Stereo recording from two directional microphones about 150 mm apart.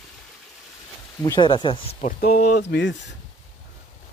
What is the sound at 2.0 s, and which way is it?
Speech, 70° left (ahead or behind).